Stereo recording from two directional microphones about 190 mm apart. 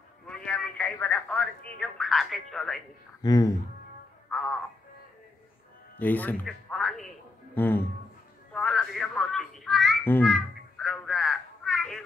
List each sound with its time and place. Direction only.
0.3 s a man's voice: 5° left (ahead or behind)
3.2 s speech: 20° left (ahead or behind)
4.3 s music: centre (ahead or behind)
5.9 s speech: 10° left (ahead or behind)
8.5 s a sound: 5° left (ahead or behind)